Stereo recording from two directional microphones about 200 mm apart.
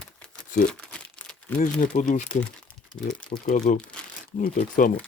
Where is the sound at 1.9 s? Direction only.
40° left (ahead or behind).